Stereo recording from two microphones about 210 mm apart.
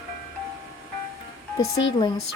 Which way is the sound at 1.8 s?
20° left (ahead or behind).